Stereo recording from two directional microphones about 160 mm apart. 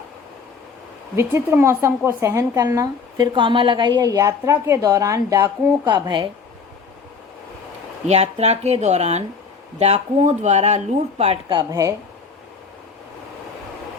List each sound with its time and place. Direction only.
1.1 s a woman's voice: 15° right (ahead or behind)
8.0 s speech: 40° right (ahead or behind)
11.5 s a woman's voice: 20° right (ahead or behind)